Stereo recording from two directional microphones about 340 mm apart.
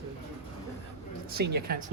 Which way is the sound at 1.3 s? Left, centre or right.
Right.